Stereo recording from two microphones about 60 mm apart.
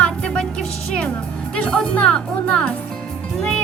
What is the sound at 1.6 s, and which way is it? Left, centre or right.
Speech, centre.